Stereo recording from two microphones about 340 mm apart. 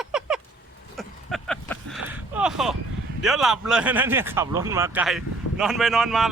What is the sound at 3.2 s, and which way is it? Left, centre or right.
Speech, centre.